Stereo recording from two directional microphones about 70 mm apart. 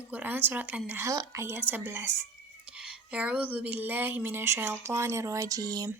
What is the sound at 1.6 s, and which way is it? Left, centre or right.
Speech, right.